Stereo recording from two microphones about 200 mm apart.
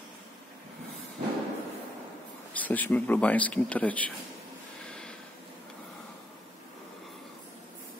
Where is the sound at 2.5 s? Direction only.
10° left (ahead or behind).